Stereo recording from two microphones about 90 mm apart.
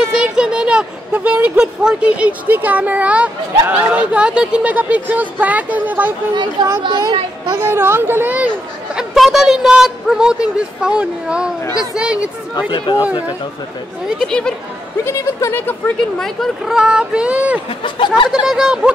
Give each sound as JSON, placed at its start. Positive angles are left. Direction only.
{"t": 0.1, "sound": "speech", "side_deg": -10}
{"t": 6.8, "sound": "speech", "side_deg": -55}
{"t": 7.6, "sound": "speech", "side_deg": -25}
{"t": 8.9, "sound": "speech", "side_deg": -5}
{"t": 12.5, "sound": "speech", "side_deg": 60}
{"t": 14.0, "sound": "speech", "side_deg": 5}
{"t": 15.0, "sound": "speech", "side_deg": 25}
{"t": 16.2, "sound": "speech", "side_deg": 0}
{"t": 16.7, "sound": "speech", "side_deg": -10}
{"t": 17.8, "sound": "speech", "side_deg": 65}
{"t": 18.3, "sound": "speech", "side_deg": -5}